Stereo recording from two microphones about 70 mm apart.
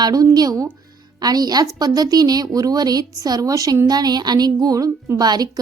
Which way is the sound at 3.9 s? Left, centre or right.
Right.